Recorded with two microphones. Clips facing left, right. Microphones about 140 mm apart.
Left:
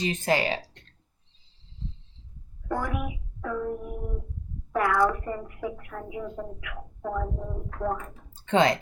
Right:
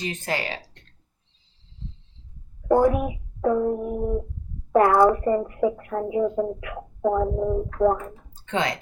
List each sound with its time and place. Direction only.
0.0 s speech: 20° left (ahead or behind)
2.7 s speech: 35° right (ahead or behind)